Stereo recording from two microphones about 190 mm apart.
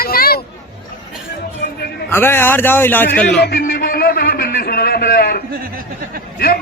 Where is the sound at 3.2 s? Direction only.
60° left (ahead or behind).